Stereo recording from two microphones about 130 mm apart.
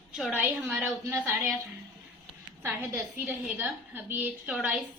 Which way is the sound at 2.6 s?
15° right (ahead or behind).